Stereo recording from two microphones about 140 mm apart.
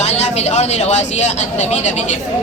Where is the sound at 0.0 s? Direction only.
50° left (ahead or behind).